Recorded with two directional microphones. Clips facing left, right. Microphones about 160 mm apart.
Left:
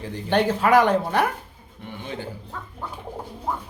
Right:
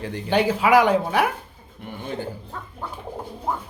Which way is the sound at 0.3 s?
10° right (ahead or behind).